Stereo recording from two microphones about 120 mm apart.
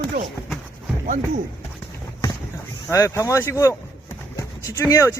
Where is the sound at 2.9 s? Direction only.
25° left (ahead or behind).